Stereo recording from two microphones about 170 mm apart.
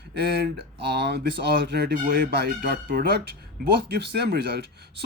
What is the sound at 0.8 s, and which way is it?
Speech, 75° right (ahead or behind).